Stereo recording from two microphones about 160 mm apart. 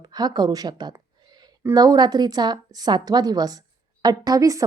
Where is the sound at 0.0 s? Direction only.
25° right (ahead or behind).